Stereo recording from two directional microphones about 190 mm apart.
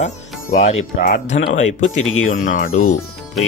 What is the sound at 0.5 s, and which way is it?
Speech, 35° left (ahead or behind).